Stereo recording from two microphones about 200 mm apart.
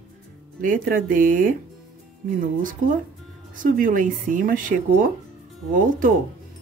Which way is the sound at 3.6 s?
45° right (ahead or behind).